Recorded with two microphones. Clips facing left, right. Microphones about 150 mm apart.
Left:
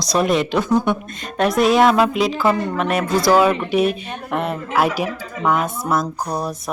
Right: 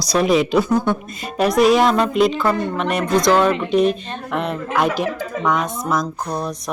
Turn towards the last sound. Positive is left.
turn(degrees=10)  # may be behind; listen again after turning